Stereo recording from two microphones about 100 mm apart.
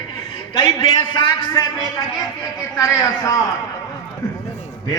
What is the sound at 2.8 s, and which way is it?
Speech, 30° left (ahead or behind).